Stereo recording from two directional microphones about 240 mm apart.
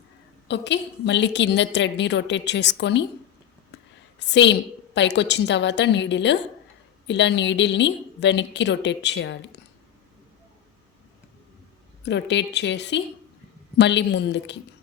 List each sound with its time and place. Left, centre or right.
0.4 s a woman's voice: left
4.2 s a woman's voice: left
12.0 s a woman's voice: left